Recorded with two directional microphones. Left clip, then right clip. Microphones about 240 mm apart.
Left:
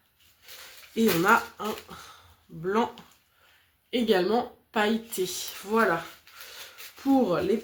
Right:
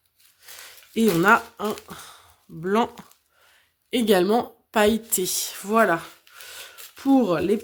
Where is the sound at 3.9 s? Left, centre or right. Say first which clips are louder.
Right 4 dB; right.